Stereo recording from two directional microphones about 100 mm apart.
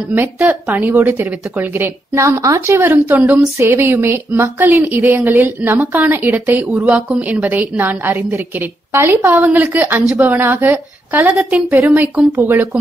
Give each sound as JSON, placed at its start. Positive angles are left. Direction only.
{"t": 0.1, "sound": "a woman's voice", "side_deg": -20}
{"t": 5.3, "sound": "a woman's voice", "side_deg": -20}